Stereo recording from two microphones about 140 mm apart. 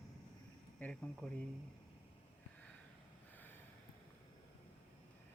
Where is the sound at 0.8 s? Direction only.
5° left (ahead or behind).